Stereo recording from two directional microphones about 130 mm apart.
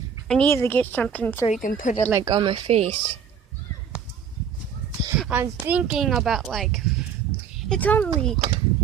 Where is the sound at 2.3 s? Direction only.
40° right (ahead or behind).